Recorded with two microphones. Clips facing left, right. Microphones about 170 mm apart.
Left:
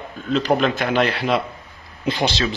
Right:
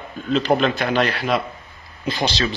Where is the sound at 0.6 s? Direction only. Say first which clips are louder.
Even; 5° left (ahead or behind).